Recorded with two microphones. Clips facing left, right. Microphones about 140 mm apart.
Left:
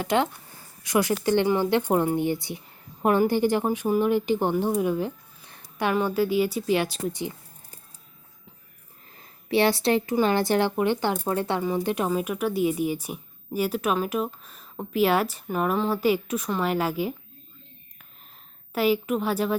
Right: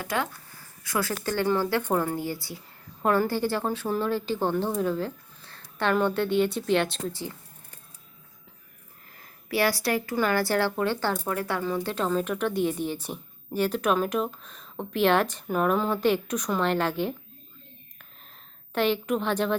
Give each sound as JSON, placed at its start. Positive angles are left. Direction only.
{"t": 0.0, "sound": "speech", "side_deg": 25}
{"t": 7.1, "sound": "a sound", "side_deg": 15}
{"t": 9.1, "sound": "a woman's voice", "side_deg": 25}
{"t": 18.7, "sound": "a woman's voice", "side_deg": 5}